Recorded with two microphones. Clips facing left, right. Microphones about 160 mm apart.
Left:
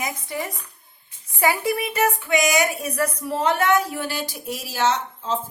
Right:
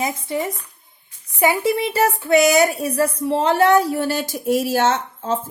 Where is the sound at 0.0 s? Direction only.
25° right (ahead or behind).